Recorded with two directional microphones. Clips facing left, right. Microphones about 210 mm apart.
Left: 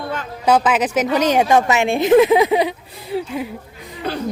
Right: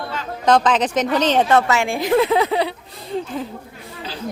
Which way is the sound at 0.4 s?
10° left (ahead or behind).